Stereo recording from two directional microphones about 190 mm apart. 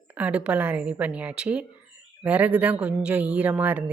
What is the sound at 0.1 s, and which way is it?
Speech, 5° right (ahead or behind).